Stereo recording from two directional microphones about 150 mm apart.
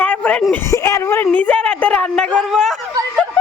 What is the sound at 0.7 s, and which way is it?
Speech, 20° left (ahead or behind).